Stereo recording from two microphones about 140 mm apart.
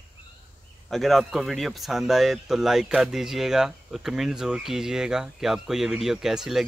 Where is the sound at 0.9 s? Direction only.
Centre (ahead or behind).